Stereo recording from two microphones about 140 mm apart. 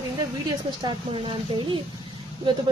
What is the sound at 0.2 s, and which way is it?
Speech, 30° right (ahead or behind).